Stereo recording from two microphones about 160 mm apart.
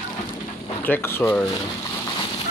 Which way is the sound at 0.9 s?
15° left (ahead or behind).